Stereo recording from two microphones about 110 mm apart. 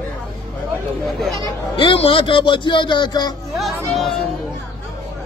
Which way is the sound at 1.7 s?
55° left (ahead or behind).